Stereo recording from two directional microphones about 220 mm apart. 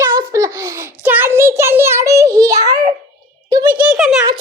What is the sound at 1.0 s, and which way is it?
Child singing, 10° right (ahead or behind).